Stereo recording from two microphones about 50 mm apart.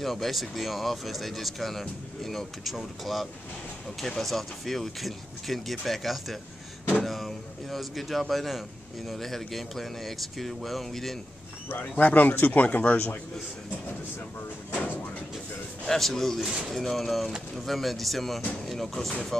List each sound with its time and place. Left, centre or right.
0.0 s speech: centre
12.0 s speech: left
14.7 s a sound: left
15.9 s speech: centre